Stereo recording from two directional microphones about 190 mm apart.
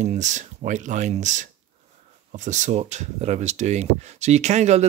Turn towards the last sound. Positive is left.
turn(degrees=-35)  # may be behind; listen again after turning